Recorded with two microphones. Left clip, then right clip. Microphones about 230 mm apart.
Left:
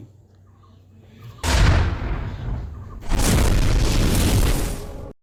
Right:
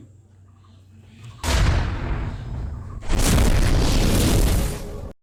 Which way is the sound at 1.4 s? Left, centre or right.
Centre.